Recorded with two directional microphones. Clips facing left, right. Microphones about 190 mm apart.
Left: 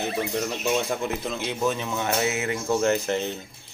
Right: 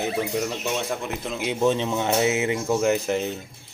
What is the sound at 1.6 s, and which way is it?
Speech, 25° right (ahead or behind).